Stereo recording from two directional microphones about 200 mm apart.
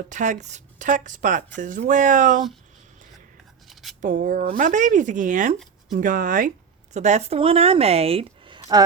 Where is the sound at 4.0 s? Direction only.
40° right (ahead or behind).